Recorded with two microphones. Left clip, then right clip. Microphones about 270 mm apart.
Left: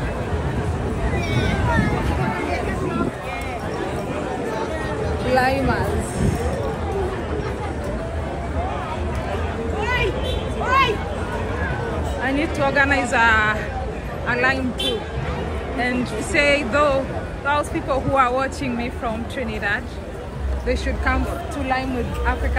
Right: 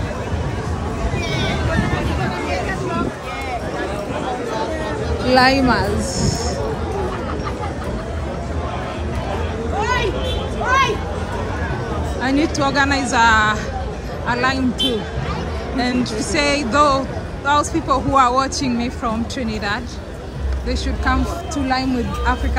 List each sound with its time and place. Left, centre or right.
5.3 s a woman's voice: right
9.8 s a sound: right
12.3 s a woman's voice: centre
16.3 s speech: centre
20.6 s a woman's voice: centre